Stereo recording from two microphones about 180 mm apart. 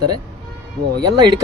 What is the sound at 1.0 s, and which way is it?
Speech, 25° right (ahead or behind).